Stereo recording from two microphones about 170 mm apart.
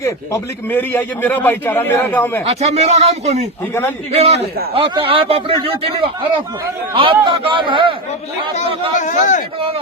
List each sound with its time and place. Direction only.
0.7 s a man's voice: 10° left (ahead or behind)
2.4 s a man's voice: 35° right (ahead or behind)
9.0 s speech: 45° left (ahead or behind)